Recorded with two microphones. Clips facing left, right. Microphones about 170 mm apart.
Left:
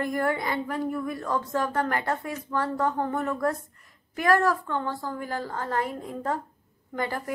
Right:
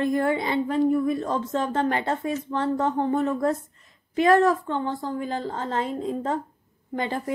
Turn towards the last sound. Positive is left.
turn(degrees=-25)  # may be behind; listen again after turning